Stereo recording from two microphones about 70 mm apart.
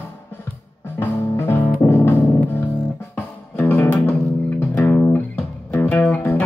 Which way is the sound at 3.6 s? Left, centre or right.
Left.